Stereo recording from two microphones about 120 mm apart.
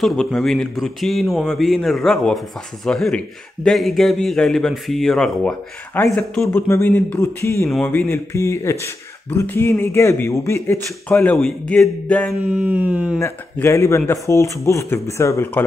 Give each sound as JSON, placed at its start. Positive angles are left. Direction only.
{"t": 0.0, "sound": "a man's voice", "side_deg": 5}
{"t": 6.0, "sound": "a man's voice", "side_deg": 15}
{"t": 12.4, "sound": "speech", "side_deg": -10}
{"t": 13.2, "sound": "a man's voice", "side_deg": 25}